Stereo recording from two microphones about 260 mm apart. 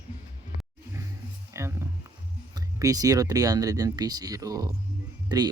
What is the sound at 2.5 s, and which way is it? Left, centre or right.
Speech, centre.